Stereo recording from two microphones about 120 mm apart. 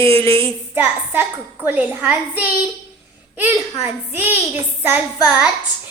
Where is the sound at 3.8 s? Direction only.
15° right (ahead or behind).